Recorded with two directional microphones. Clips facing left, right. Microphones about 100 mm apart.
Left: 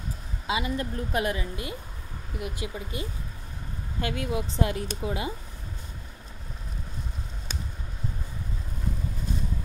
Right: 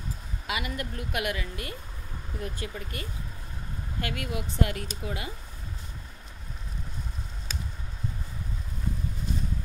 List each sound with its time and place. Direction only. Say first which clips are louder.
0.5 s speech: left 4 dB; 25° left (ahead or behind)
2.3 s speech: left 2 dB; 10° left (ahead or behind)